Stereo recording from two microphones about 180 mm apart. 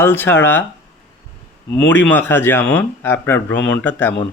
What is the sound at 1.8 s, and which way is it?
Speech, 10° left (ahead or behind).